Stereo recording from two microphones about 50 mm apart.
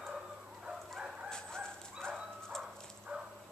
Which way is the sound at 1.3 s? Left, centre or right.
Centre.